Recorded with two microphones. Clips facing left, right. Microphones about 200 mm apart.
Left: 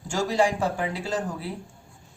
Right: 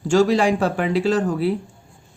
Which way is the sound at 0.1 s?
85° right.